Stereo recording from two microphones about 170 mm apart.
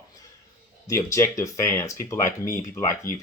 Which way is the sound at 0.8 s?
20° left (ahead or behind).